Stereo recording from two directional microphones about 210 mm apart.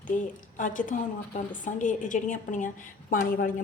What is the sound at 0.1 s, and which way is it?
A woman's voice, 40° left (ahead or behind).